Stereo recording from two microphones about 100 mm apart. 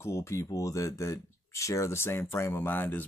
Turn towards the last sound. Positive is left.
turn(degrees=20)  # may be behind; listen again after turning